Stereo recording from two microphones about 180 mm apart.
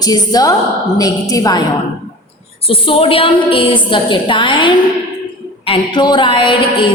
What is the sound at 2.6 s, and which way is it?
A woman's voice, 30° left (ahead or behind).